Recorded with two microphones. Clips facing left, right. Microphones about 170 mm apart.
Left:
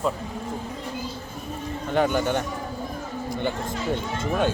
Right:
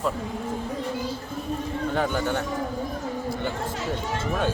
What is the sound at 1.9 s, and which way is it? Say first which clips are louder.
Speech: left 4 dB; centre (ahead or behind).